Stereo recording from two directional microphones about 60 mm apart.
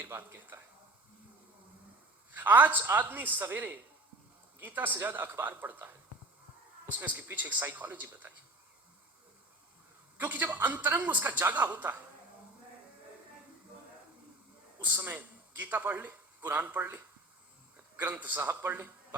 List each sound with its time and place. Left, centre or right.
0.0 s speech: right
2.3 s a man's voice: right
7.0 s a man's voice: right
10.2 s a man's voice: right
14.8 s a man's voice: right
18.0 s a man's voice: right